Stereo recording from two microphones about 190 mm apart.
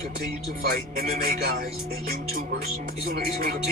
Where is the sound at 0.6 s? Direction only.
50° right (ahead or behind).